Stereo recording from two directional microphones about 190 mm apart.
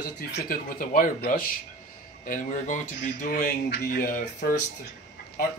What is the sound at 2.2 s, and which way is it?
Speech, 45° left (ahead or behind).